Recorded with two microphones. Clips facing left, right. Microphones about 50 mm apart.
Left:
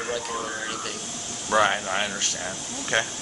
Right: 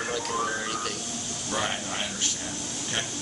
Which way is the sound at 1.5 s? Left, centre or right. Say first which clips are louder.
Left 9 dB; left.